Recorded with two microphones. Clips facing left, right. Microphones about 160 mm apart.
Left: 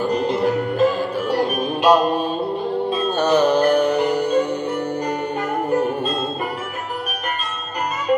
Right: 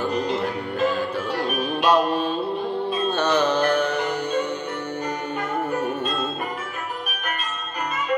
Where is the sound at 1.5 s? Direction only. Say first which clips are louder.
Left 2 dB; 40° left (ahead or behind).